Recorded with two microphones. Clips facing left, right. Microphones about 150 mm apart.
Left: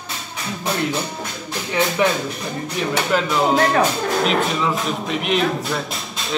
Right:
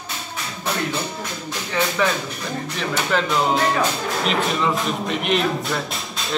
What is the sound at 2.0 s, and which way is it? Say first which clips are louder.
Speech: left 3 dB; 15° left (ahead or behind).